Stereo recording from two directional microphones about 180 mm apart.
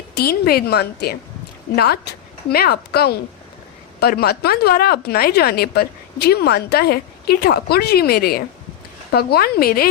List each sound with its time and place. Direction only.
0.2 s speech: 55° left (ahead or behind)